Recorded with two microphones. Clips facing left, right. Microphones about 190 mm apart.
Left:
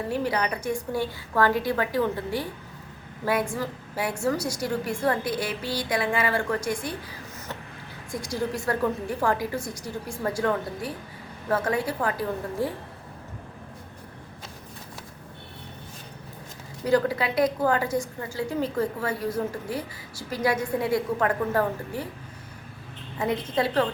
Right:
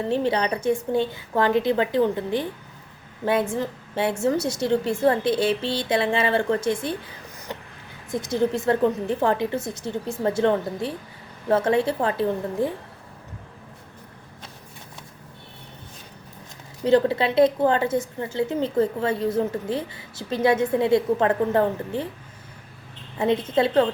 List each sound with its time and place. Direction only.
0.1 s a woman's voice: 25° right (ahead or behind)
8.1 s a woman's voice: 20° right (ahead or behind)
16.8 s a woman's voice: 25° right (ahead or behind)
23.1 s a woman's voice: 25° right (ahead or behind)